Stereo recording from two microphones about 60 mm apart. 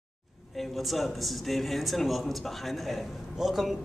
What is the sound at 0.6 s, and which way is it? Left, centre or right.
A man's voice, centre.